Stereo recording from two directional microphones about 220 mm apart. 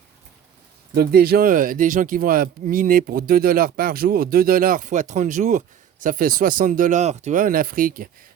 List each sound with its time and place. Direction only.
0.9 s speech: 45° right (ahead or behind)